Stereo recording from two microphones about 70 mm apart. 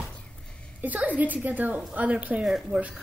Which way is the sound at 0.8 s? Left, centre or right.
Right.